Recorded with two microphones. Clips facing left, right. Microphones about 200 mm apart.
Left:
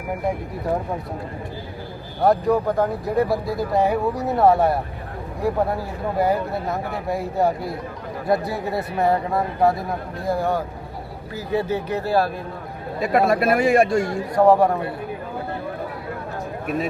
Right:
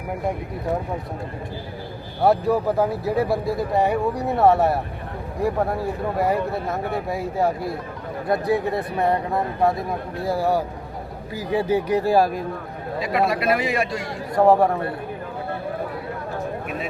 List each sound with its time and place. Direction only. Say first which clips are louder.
2.2 s speech: left 1 dB; 5° right (ahead or behind)
13.0 s speech: left 4 dB; 50° left (ahead or behind)
14.3 s speech: left 1 dB; centre (ahead or behind)